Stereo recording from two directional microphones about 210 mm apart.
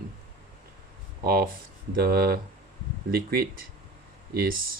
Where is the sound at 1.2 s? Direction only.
45° right (ahead or behind).